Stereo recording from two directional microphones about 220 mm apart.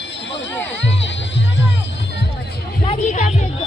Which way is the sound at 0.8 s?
55° left (ahead or behind).